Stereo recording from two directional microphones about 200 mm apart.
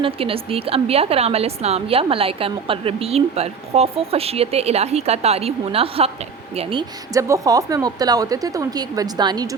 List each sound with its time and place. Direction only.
0.0 s a woman's voice: 30° right (ahead or behind)